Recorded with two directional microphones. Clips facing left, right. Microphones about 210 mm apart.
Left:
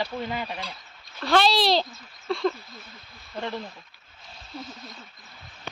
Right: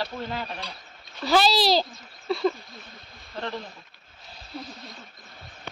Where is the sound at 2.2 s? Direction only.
5° right (ahead or behind).